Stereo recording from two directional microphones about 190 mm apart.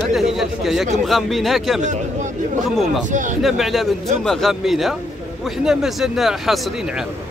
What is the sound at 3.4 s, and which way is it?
A man's voice, centre (ahead or behind).